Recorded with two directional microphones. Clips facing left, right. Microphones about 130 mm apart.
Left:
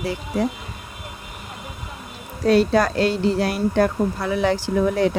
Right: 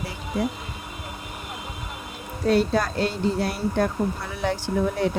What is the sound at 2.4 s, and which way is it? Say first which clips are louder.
Speech: left 4 dB; 85° left.